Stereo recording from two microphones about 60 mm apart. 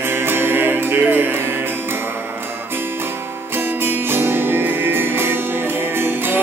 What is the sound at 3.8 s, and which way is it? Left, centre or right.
Music, right.